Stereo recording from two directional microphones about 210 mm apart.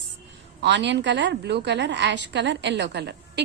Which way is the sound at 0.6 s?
55° right (ahead or behind).